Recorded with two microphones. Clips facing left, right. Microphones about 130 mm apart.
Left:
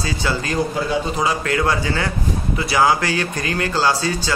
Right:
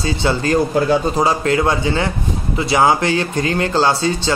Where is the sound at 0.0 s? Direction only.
25° right (ahead or behind).